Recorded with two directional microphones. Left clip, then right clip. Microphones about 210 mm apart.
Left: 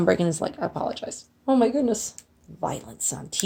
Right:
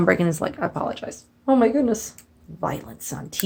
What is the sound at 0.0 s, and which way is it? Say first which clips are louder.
Speech: right 2 dB; 35° left (ahead or behind).